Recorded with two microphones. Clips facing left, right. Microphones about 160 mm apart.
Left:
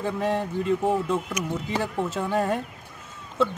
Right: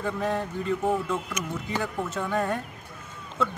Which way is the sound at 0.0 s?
20° left (ahead or behind).